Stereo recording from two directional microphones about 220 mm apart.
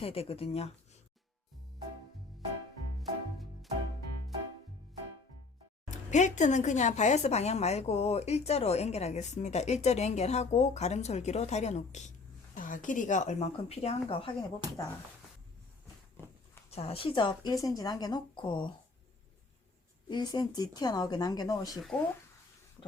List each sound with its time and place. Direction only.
0.0 s a woman's voice: 25° left (ahead or behind)
3.0 s music: centre (ahead or behind)
5.9 s speech: 35° left (ahead or behind)
16.6 s a woman's voice: 25° left (ahead or behind)
20.1 s speech: 20° left (ahead or behind)
21.8 s speech: centre (ahead or behind)